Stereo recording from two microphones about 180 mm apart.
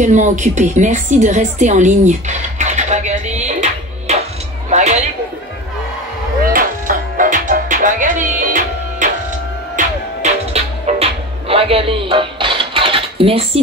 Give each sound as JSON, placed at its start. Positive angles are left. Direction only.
{"t": 0.0, "sound": "a woman's voice", "side_deg": -40}
{"t": 4.6, "sound": "music", "side_deg": -40}
{"t": 6.4, "sound": "music", "side_deg": -50}